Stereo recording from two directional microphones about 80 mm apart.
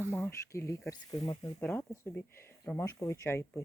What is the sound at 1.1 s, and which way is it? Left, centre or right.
Speech, left.